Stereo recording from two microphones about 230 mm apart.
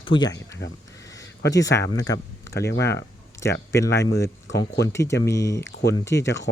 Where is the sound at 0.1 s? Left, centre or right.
Centre.